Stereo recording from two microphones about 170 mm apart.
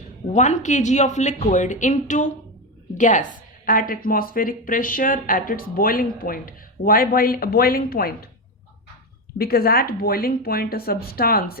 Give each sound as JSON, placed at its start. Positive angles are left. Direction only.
{"t": 0.3, "sound": "a woman's voice", "side_deg": 45}
{"t": 9.4, "sound": "a woman's voice", "side_deg": 60}